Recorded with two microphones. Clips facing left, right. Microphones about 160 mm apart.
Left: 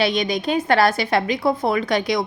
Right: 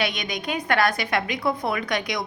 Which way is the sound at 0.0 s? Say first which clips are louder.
Left 7 dB; 30° left (ahead or behind).